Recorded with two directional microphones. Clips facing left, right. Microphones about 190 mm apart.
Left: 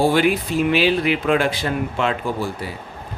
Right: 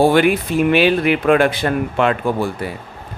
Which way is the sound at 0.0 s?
60° right (ahead or behind).